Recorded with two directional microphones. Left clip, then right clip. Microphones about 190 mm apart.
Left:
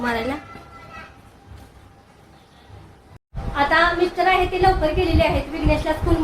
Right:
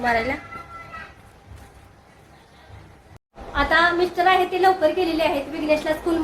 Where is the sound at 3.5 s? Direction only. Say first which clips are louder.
Left 1 dB; 15° right (ahead or behind).